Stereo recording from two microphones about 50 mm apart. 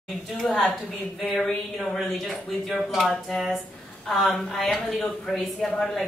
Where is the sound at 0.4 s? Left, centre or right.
Centre.